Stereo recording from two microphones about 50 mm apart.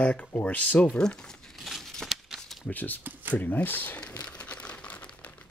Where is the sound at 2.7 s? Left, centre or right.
Left.